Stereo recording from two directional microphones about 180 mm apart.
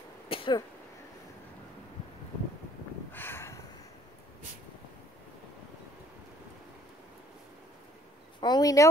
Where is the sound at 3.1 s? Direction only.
10° left (ahead or behind).